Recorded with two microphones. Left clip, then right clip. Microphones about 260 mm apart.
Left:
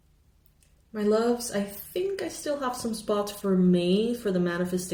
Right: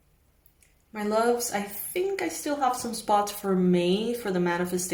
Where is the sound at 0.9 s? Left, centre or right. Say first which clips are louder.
Even; centre.